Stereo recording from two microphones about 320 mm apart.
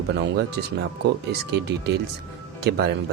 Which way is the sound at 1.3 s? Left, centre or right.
Right.